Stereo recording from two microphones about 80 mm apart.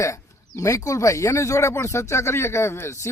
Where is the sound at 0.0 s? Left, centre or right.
Left.